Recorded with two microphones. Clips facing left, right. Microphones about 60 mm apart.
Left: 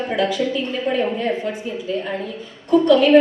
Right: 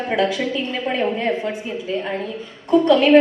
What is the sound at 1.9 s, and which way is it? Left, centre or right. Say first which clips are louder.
A woman's voice: right 1 dB; right.